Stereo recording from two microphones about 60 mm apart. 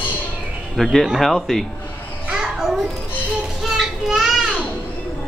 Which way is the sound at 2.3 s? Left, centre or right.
Centre.